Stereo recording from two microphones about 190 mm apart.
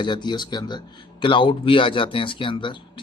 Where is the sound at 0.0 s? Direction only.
25° left (ahead or behind).